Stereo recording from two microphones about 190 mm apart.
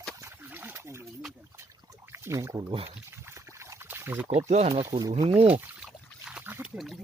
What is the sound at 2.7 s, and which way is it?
Speech, 30° right (ahead or behind).